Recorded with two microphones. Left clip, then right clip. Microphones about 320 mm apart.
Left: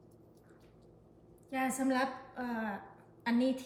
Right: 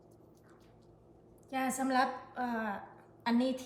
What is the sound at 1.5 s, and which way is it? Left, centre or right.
A woman's voice, centre.